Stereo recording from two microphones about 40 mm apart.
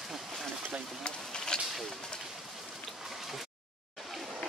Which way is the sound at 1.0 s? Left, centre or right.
Centre.